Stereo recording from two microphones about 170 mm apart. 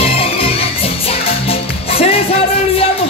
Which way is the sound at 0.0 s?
35° left (ahead or behind).